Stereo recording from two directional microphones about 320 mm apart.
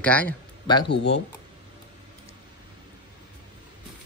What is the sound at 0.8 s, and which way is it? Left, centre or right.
Speech, left.